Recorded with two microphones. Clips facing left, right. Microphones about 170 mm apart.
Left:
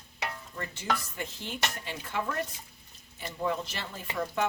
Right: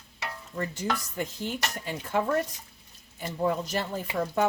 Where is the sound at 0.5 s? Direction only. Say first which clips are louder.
Right 4 dB; 40° right (ahead or behind).